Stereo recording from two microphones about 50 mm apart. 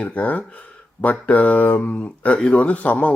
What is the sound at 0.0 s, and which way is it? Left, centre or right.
Speech, left.